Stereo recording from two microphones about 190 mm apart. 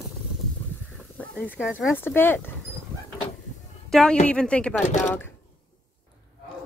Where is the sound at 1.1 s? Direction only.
10° left (ahead or behind).